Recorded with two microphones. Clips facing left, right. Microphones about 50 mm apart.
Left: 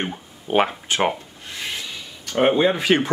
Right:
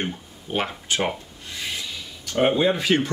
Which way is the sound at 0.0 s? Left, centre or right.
Left.